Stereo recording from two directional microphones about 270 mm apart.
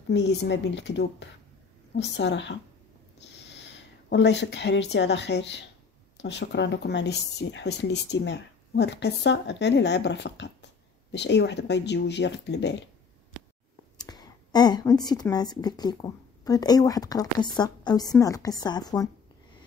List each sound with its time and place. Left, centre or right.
0.1 s speech: left
13.9 s a woman's voice: centre